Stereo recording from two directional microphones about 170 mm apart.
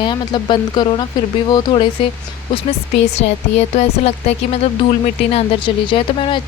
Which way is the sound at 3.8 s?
40° left (ahead or behind).